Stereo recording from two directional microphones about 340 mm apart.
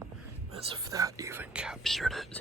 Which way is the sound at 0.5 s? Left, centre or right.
Centre.